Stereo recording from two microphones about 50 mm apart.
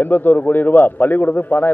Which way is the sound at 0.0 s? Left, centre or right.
Left.